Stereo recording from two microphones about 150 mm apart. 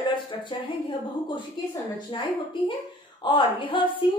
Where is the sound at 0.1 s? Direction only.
35° left (ahead or behind).